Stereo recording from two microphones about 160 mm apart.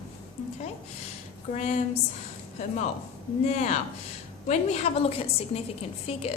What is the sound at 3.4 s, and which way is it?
A woman's voice, 45° left (ahead or behind).